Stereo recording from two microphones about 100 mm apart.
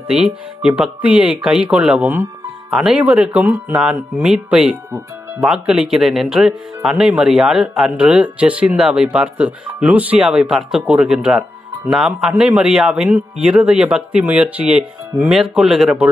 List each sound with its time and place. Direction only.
0.1 s speech: 10° right (ahead or behind)
3.1 s speech: 15° right (ahead or behind)